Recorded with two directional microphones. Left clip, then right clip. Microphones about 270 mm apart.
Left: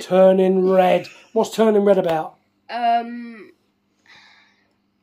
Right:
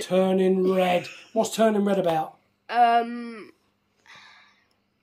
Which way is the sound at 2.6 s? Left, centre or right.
Centre.